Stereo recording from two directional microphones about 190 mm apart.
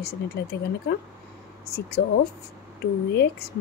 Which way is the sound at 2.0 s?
55° left (ahead or behind).